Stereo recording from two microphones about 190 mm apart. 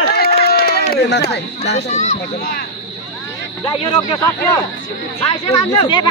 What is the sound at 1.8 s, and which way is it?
Speech, 40° left (ahead or behind).